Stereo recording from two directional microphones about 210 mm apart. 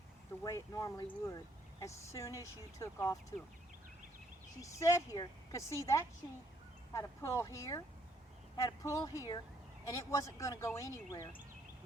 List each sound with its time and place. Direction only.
0.4 s speech: 15° left (ahead or behind)
4.6 s speech: 15° left (ahead or behind)